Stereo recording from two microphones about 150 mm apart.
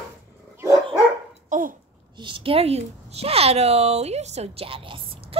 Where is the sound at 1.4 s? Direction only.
60° right (ahead or behind).